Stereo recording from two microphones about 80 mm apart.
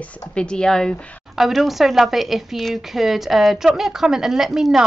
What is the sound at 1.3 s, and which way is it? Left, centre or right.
A woman's voice, centre.